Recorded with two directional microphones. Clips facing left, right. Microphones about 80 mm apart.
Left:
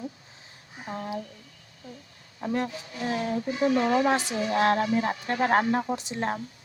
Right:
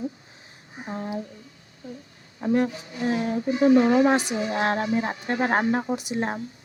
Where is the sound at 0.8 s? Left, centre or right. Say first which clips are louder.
Right 2 dB; centre.